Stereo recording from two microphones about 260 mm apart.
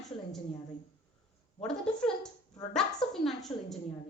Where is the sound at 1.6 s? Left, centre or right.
Centre.